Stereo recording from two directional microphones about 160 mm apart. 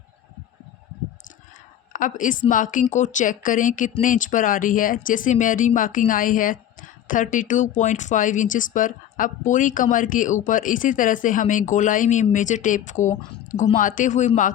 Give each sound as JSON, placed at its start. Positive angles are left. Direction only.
{"t": 1.9, "sound": "a woman's voice", "side_deg": 55}